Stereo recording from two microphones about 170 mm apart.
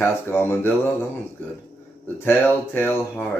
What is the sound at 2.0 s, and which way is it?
Speech, 10° left (ahead or behind).